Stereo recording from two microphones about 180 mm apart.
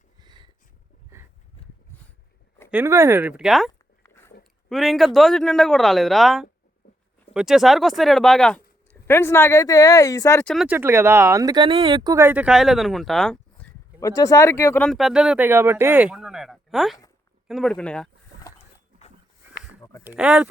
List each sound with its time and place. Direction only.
0.2 s a sound: 25° right (ahead or behind)
2.6 s speech: 10° right (ahead or behind)
3.7 s a sound: 15° left (ahead or behind)
4.7 s speech: centre (ahead or behind); by 10.5 s 15° left (ahead or behind)
10.5 s speech: 5° right (ahead or behind)
14.0 s speech: 20° left (ahead or behind)
14.8 s speech: centre (ahead or behind)
20.1 s speech: 5° right (ahead or behind)